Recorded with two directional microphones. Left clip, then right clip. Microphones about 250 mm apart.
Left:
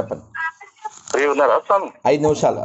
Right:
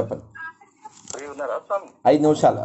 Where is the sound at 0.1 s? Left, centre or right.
Left.